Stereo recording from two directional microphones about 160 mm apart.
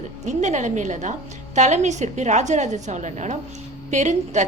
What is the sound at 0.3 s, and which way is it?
A woman's voice, 50° right (ahead or behind).